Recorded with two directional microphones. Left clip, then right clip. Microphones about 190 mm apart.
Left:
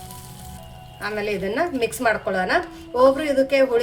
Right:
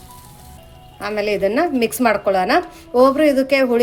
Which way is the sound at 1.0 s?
45° right (ahead or behind).